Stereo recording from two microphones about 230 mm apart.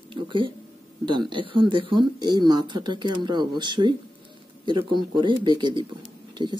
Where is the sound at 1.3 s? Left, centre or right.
Right.